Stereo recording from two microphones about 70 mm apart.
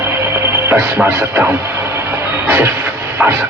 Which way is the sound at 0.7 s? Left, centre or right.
Right.